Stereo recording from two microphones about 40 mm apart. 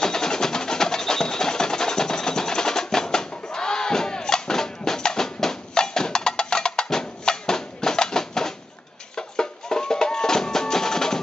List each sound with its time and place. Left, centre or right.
0.0 s music: centre